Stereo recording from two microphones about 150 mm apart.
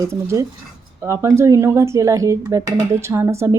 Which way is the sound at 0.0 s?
20° right (ahead or behind).